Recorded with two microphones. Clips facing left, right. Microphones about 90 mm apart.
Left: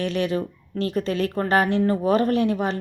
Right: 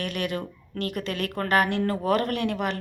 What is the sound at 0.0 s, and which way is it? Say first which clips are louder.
A woman's voice: left 6 dB; 25° left (ahead or behind).